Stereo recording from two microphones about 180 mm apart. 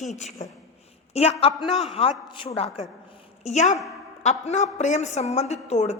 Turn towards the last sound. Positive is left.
turn(degrees=40)  # may be behind; listen again after turning